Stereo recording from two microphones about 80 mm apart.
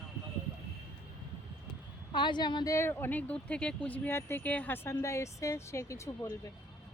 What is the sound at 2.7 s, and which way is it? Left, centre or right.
Speech, left.